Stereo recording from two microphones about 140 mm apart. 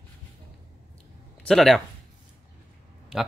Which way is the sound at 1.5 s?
Centre (ahead or behind).